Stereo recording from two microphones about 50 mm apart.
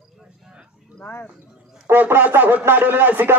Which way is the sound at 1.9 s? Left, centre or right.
Right.